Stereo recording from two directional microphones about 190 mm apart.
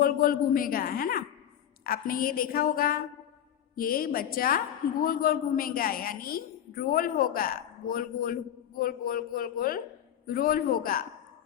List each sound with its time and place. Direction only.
0.0 s a woman's voice: 50° left (ahead or behind)